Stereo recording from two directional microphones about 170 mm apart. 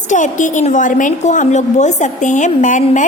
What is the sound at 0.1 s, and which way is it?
A woman's voice, 45° left (ahead or behind).